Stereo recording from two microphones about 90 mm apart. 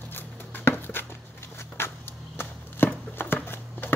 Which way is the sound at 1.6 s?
25° left (ahead or behind).